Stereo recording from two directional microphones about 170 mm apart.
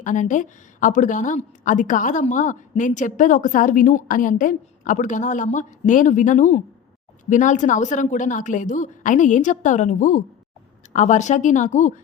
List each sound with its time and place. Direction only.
0.0 s a woman's voice: 50° left (ahead or behind)